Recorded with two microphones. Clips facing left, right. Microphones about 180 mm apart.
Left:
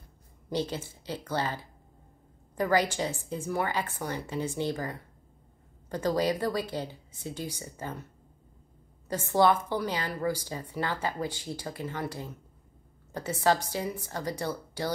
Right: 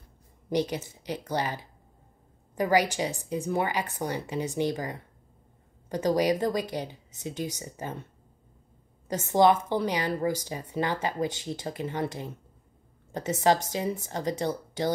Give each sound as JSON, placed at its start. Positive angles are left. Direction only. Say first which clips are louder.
{"t": 0.5, "sound": "a woman's voice", "louder": "right 4 dB", "side_deg": -15}